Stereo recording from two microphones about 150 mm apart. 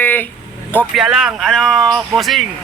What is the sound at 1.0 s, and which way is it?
Speech, 5° right (ahead or behind).